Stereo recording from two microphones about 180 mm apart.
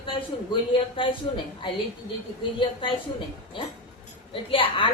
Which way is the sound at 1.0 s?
30° left (ahead or behind).